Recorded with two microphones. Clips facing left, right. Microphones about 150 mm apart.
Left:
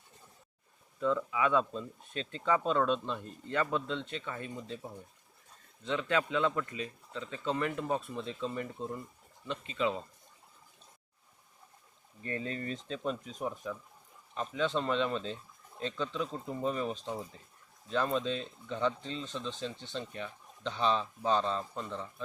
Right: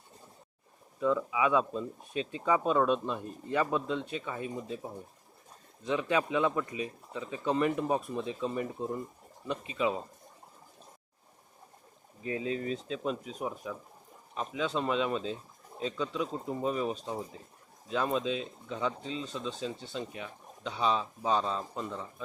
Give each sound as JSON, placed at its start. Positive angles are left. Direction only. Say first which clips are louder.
{"t": 0.9, "sound": "speech", "louder": "right 2 dB", "side_deg": -10}
{"t": 12.2, "sound": "speech", "louder": "right 4 dB", "side_deg": -5}